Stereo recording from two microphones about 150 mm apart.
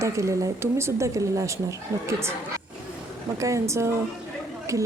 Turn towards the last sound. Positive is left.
turn(degrees=-20)  # may be behind; listen again after turning